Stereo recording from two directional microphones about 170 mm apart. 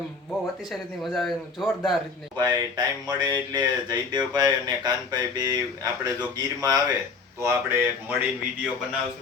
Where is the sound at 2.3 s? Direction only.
20° right (ahead or behind).